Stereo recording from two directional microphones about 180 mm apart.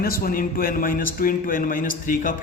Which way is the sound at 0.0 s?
55° left (ahead or behind).